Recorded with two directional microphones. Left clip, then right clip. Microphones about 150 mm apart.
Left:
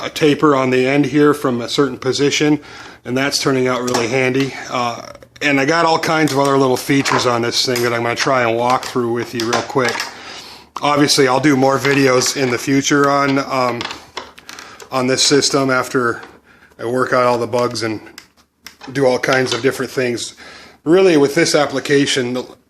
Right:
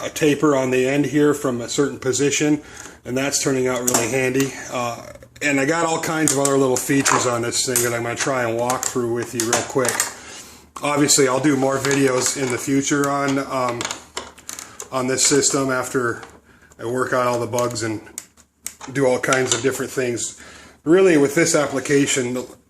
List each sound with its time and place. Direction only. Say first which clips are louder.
0.0 s speech: left 4 dB; 40° left (ahead or behind); by 13.7 s 60° left (ahead or behind)
14.9 s speech: left 5 dB; 60° left (ahead or behind)
18.9 s speech: left 4 dB; 35° left (ahead or behind)
19.3 s speech: left 4 dB; 50° left (ahead or behind)
21.2 s speech: left 4 dB; 30° left (ahead or behind)